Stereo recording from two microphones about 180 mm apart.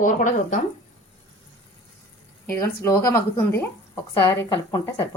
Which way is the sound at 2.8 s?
20° left (ahead or behind).